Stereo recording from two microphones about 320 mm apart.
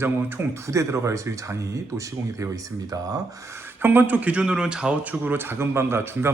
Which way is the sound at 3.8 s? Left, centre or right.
Centre.